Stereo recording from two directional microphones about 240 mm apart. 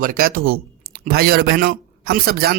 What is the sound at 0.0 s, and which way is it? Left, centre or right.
A man's voice, right.